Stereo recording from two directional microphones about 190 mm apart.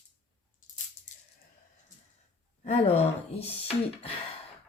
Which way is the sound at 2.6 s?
35° left (ahead or behind).